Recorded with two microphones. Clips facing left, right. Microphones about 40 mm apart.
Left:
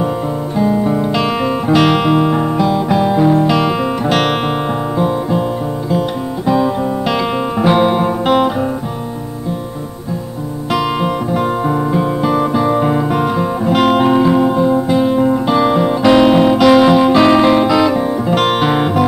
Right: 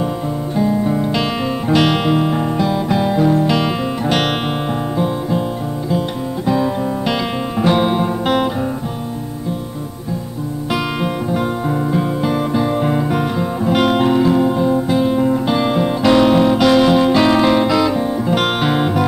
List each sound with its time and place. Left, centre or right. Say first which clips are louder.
0.6 s guitar: left 2 dB; centre
1.7 s music: left 3 dB; centre
10.7 s music: left 5 dB; centre
14.1 s music: left 2 dB; centre
14.5 s music: left 3 dB; centre